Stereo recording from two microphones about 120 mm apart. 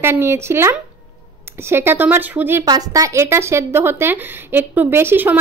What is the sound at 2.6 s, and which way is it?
A woman's voice, 30° right (ahead or behind).